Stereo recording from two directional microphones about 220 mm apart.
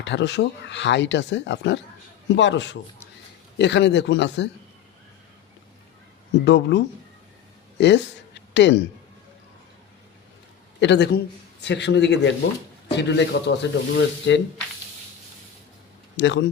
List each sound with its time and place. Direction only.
0.0 s a man's voice: 55° left (ahead or behind)
6.4 s speech: 50° left (ahead or behind)
10.8 s speech: 50° left (ahead or behind)
16.1 s a man's voice: 55° left (ahead or behind)